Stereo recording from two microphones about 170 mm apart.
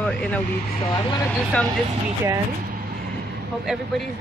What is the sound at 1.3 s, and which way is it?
Speech, 5° left (ahead or behind).